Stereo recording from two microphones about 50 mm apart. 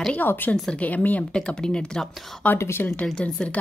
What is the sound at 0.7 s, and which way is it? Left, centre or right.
Speech, left.